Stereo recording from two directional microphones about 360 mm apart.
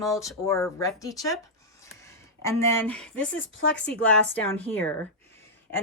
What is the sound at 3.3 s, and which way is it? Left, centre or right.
Speech, left.